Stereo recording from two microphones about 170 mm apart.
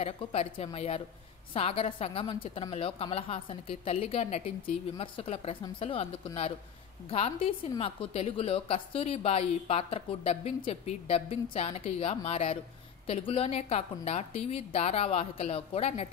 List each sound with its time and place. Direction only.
0.0 s a woman's voice: 35° left (ahead or behind)